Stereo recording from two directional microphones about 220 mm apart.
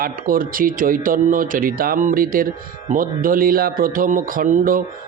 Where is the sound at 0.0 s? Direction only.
40° right (ahead or behind).